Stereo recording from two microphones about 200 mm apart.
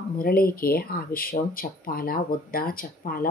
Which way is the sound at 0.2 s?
45° left (ahead or behind).